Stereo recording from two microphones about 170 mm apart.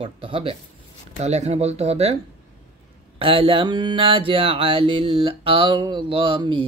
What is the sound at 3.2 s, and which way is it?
Speech, 30° right (ahead or behind).